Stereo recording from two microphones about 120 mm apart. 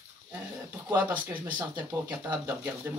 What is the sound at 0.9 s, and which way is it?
Speech, 15° right (ahead or behind).